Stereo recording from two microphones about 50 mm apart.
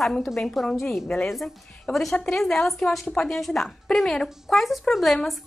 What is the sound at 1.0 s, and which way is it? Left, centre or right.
Speech, centre.